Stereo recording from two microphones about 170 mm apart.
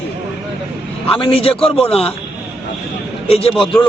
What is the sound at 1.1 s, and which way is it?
Speech, 30° left (ahead or behind).